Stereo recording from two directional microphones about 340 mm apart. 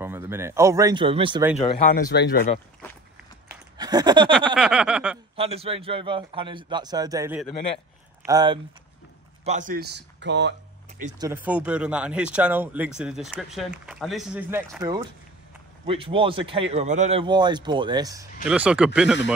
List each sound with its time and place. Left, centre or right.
0.0 s a man's voice: centre
2.0 s speech: left
3.7 s a sound: centre
4.6 s speech: centre
5.3 s a man's voice: centre
11.0 s speech: centre
11.2 s a man's voice: centre